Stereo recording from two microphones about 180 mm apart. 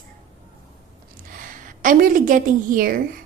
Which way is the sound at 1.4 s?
50° right (ahead or behind).